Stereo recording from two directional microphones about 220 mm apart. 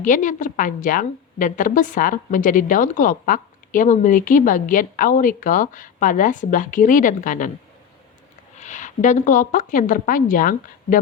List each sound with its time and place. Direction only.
0.0 s a woman's voice: 35° left (ahead or behind)
8.5 s a woman's voice: 35° left (ahead or behind)